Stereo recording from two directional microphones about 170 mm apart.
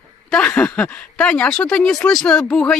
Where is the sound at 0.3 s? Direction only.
5° left (ahead or behind).